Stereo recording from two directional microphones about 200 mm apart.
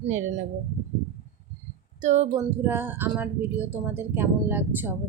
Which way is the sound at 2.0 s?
35° right (ahead or behind).